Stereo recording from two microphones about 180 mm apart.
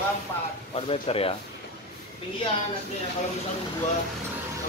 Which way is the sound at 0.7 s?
30° left (ahead or behind).